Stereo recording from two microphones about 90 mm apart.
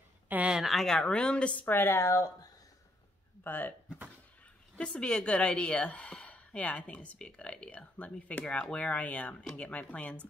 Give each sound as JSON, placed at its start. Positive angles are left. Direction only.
{"t": 0.3, "sound": "a sound", "side_deg": -15}
{"t": 0.6, "sound": "a woman's voice", "side_deg": 0}
{"t": 1.7, "sound": "speech", "side_deg": 25}
{"t": 3.4, "sound": "a woman's voice", "side_deg": 20}